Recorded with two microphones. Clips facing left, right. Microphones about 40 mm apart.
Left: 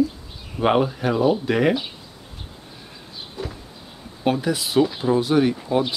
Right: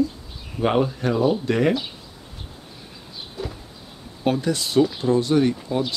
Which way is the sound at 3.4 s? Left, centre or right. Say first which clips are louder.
Even; centre.